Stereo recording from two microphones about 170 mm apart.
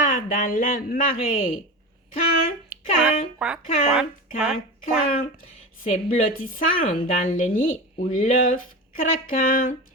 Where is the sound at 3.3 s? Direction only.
5° right (ahead or behind).